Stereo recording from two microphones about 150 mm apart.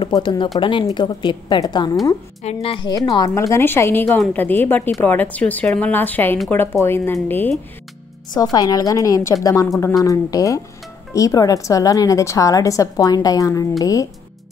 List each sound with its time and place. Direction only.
0.0 s a woman's voice: 30° left (ahead or behind); by 7.5 s 15° left (ahead or behind)
8.4 s a woman's voice: 25° left (ahead or behind)